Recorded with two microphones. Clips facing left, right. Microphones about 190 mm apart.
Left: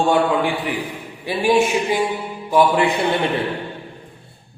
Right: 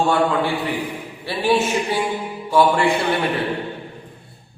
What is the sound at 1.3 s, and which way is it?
A man's voice, 15° left (ahead or behind).